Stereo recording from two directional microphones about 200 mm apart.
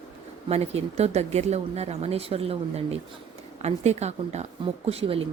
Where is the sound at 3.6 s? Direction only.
35° right (ahead or behind).